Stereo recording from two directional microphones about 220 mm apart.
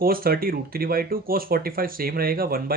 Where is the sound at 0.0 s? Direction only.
40° right (ahead or behind).